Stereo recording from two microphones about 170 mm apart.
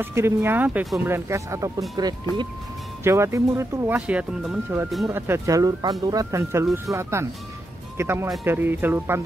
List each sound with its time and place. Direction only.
0.0 s speech: 15° right (ahead or behind)